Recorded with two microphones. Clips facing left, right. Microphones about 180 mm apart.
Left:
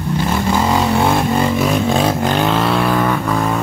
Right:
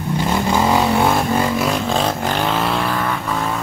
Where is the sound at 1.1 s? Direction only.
Centre (ahead or behind).